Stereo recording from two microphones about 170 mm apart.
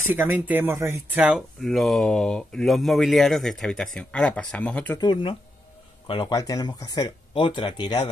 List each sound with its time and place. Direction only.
0.1 s speech: 10° right (ahead or behind); by 4.9 s 10° left (ahead or behind)
4.9 s speech: 25° left (ahead or behind)